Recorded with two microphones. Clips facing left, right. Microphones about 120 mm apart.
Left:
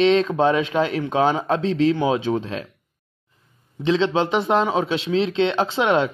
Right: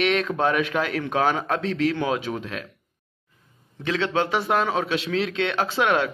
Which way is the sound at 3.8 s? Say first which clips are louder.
Left 5 dB; 25° left (ahead or behind).